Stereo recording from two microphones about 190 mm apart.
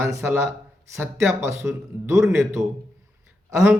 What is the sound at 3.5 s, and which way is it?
Speech, 15° right (ahead or behind).